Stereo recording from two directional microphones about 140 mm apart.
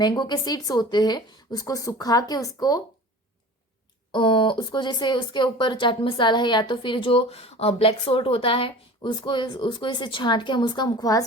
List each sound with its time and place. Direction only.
0.0 s speech: 30° left (ahead or behind)
4.1 s speech: 35° left (ahead or behind)